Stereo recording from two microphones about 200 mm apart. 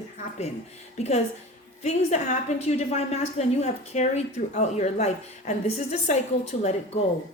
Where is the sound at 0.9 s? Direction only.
35° left (ahead or behind).